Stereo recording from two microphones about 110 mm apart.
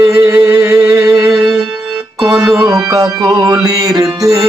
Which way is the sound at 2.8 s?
30° right (ahead or behind).